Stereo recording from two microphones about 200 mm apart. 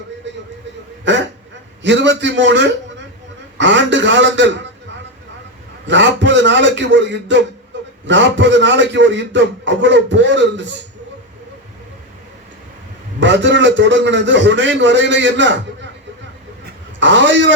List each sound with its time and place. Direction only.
0.3 s music: 65° right (ahead or behind)
1.1 s a man's voice: 65° right (ahead or behind)
5.9 s a man's voice: 65° right (ahead or behind)
13.1 s a man's voice: 65° right (ahead or behind)
17.0 s a man's voice: 65° right (ahead or behind)